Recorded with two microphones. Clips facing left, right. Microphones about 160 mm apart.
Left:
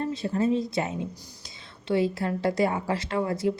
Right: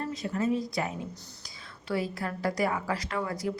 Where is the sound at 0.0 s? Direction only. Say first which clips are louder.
Left 4 dB; 30° left (ahead or behind).